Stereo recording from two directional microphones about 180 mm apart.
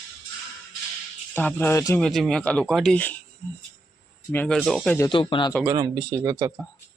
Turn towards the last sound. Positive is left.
turn(degrees=-20)  # may be behind; listen again after turning